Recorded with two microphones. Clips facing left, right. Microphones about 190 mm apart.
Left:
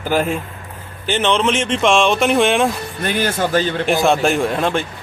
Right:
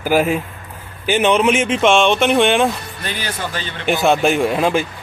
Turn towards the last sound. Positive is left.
turn(degrees=-5)  # may be behind; listen again after turning